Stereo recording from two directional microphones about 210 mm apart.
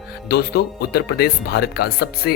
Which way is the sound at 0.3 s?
50° left (ahead or behind).